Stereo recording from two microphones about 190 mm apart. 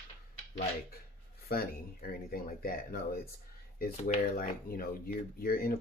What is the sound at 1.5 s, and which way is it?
Speech, 50° left (ahead or behind).